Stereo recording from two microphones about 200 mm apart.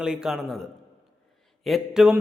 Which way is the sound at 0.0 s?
5° right (ahead or behind).